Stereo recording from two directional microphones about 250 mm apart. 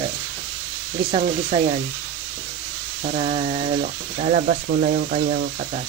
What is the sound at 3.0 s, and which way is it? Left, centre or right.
Speech, right.